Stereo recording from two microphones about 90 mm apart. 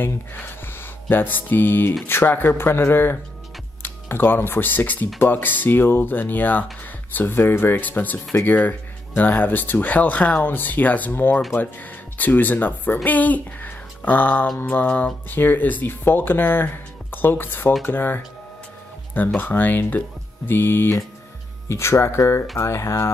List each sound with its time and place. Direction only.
0.0 s speech: 25° left (ahead or behind)
14.6 s mantra: 20° left (ahead or behind)
15.2 s speech: 20° left (ahead or behind)